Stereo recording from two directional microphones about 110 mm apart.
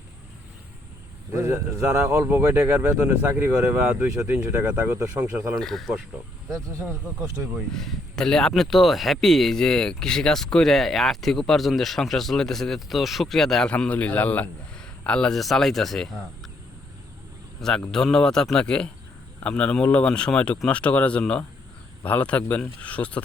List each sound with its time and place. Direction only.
1.3 s speech: 25° right (ahead or behind)
5.5 s speech: centre (ahead or behind)
6.7 s speech: 25° right (ahead or behind)
7.7 s speech: 5° left (ahead or behind)
17.6 s speech: 5° left (ahead or behind)